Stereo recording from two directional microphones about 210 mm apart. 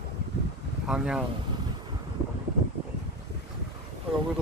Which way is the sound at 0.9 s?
5° right (ahead or behind).